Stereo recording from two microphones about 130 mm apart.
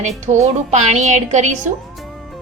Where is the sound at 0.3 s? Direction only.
60° right (ahead or behind).